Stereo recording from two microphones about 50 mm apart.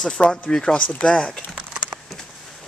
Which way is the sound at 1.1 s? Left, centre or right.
Centre.